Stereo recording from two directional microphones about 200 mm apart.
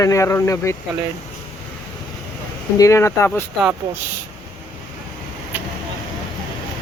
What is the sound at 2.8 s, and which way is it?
Speech, 15° left (ahead or behind).